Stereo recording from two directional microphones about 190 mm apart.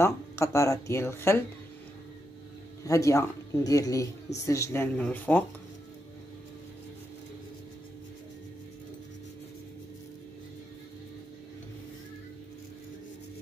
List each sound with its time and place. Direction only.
0.0 s speech: 15° left (ahead or behind)
2.8 s speech: 15° left (ahead or behind)